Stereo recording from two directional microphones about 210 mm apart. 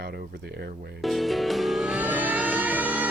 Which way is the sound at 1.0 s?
Centre (ahead or behind).